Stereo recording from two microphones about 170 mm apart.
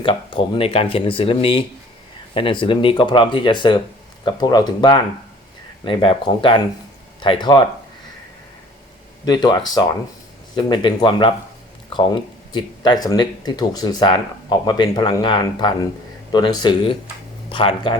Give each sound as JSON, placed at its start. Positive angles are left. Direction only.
{"t": 0.0, "sound": "speech", "side_deg": 30}
{"t": 9.2, "sound": "speech", "side_deg": 25}